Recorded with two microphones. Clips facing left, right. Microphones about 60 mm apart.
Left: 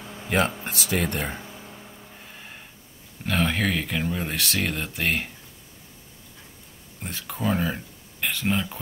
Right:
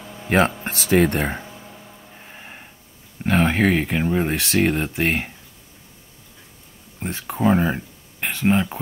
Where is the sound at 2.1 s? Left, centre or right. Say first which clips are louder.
Right 3 dB; right.